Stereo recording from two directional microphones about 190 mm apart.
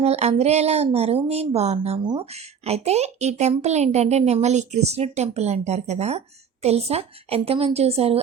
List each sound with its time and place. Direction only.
0.0 s a child's voice: 35° right (ahead or behind)